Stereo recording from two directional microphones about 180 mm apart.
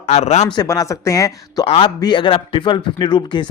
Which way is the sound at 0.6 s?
20° left (ahead or behind).